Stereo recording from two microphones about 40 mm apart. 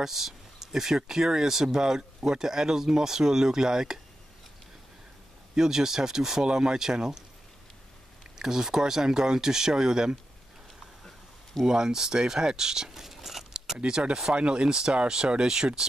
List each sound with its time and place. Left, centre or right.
0.0 s speech: centre
5.6 s speech: centre
8.4 s speech: centre
11.6 s speech: centre
13.7 s speech: right
14.3 s speech: right